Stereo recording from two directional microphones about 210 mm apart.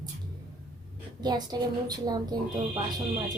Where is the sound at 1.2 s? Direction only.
20° right (ahead or behind).